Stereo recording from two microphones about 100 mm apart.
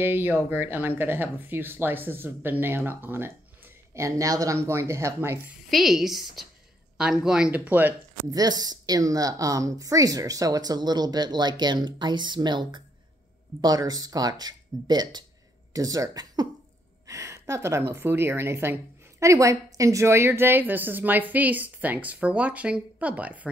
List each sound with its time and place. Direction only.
0.0 s a woman's voice: 20° right (ahead or behind)
5.7 s a woman's voice: centre (ahead or behind)
8.3 s a woman's voice: 40° right (ahead or behind); by 23.5 s 15° right (ahead or behind)